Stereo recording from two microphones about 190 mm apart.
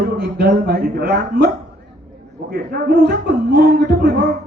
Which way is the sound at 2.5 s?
50° right (ahead or behind).